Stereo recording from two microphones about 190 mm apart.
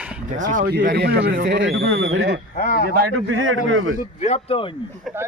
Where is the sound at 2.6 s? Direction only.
50° left (ahead or behind).